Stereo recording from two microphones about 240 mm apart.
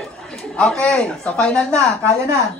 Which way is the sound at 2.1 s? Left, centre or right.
Centre.